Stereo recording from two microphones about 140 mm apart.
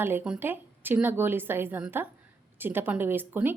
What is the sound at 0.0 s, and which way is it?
A woman's voice, 15° right (ahead or behind).